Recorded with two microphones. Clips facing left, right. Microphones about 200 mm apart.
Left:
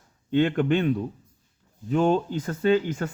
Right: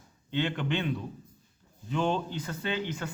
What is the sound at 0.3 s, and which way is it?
A man's voice, 50° left (ahead or behind).